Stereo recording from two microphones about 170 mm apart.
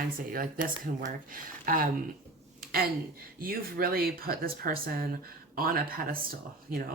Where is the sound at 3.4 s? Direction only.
60° right (ahead or behind).